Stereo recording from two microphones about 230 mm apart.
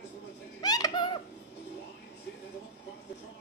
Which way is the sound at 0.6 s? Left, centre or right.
Centre.